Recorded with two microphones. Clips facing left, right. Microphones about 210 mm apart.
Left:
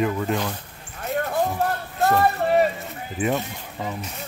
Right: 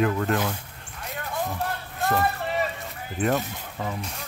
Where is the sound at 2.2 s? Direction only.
45° left (ahead or behind).